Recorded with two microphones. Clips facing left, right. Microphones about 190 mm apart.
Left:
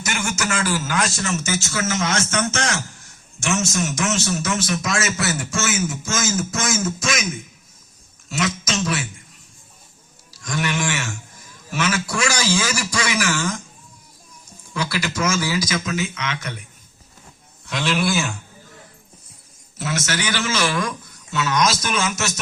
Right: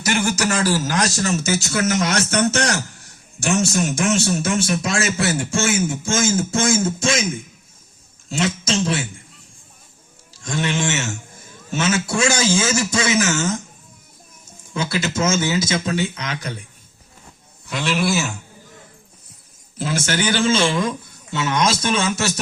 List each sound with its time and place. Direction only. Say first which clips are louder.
0.0 s speech: right 5 dB; 35° right (ahead or behind)
8.3 s speech: right 3 dB; 30° right (ahead or behind)
10.3 s speech: right 2 dB; 25° right (ahead or behind)
14.7 s speech: right 2 dB; 25° right (ahead or behind)
17.7 s a man's voice: right 1 dB; centre (ahead or behind)
19.8 s speech: right 4 dB; 30° right (ahead or behind)